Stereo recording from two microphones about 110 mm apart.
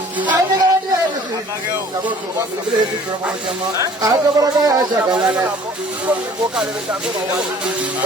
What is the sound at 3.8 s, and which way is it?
Speech, 30° right (ahead or behind).